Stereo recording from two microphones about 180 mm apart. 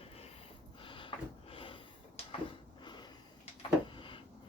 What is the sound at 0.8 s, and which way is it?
Cupboard open or close, 30° left (ahead or behind).